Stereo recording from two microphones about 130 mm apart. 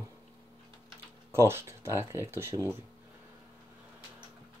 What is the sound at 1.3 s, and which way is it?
Speech, 20° right (ahead or behind).